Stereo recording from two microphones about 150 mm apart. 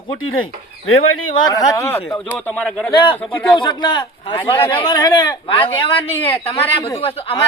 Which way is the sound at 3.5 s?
30° left (ahead or behind).